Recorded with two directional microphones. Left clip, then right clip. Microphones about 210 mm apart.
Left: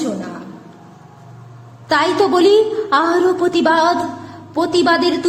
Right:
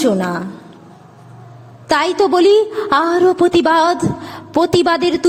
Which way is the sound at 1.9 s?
30° right (ahead or behind).